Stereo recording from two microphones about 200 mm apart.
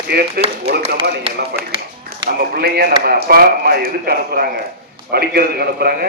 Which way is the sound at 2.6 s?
50° right (ahead or behind).